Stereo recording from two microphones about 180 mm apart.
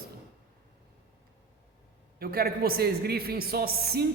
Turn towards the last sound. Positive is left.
turn(degrees=-60)  # may be behind; listen again after turning